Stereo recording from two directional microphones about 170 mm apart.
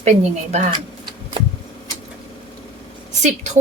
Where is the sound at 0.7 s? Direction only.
25° right (ahead or behind).